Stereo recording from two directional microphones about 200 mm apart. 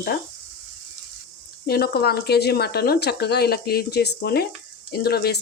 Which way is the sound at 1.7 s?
50° left (ahead or behind).